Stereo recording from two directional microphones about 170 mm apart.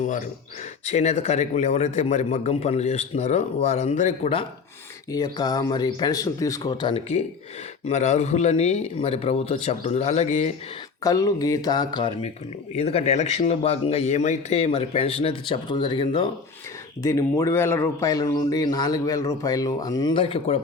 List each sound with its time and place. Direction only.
0.9 s a man's voice: 40° left (ahead or behind)
5.1 s a man's voice: 25° left (ahead or behind)
6.9 s a man's voice: 40° left (ahead or behind)
11.0 s a man's voice: 20° left (ahead or behind)
12.7 s a man's voice: 35° left (ahead or behind)
17.0 s a man's voice: 20° left (ahead or behind); by 20.6 s 35° left (ahead or behind)